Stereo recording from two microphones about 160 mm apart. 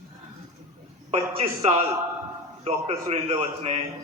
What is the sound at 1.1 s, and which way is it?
A man's voice, 40° right (ahead or behind).